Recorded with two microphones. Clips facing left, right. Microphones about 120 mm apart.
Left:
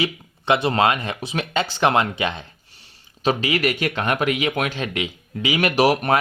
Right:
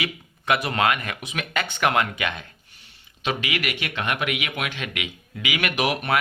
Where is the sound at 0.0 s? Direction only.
25° left (ahead or behind).